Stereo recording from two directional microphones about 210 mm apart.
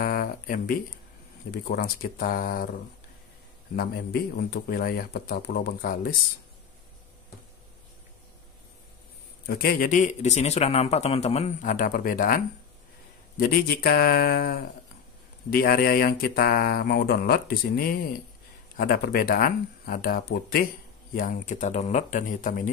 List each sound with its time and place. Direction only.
0.0 s a sound: 45° left (ahead or behind)
1.5 s speech: 45° left (ahead or behind)
3.7 s speech: 45° left (ahead or behind)
9.5 s speech: 45° left (ahead or behind)
13.4 s speech: 45° left (ahead or behind)